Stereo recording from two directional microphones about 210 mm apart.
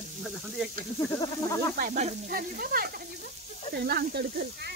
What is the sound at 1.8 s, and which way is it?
Speech, 35° right (ahead or behind).